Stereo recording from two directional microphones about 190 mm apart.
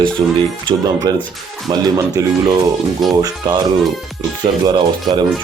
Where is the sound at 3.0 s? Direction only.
Centre (ahead or behind).